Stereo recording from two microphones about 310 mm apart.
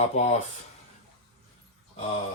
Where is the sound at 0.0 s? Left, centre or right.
Left.